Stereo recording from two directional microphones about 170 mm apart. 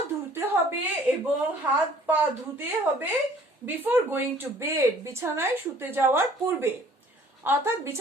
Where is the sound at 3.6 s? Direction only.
10° right (ahead or behind).